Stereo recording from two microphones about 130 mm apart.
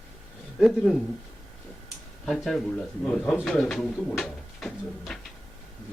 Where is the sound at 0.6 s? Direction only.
5° right (ahead or behind).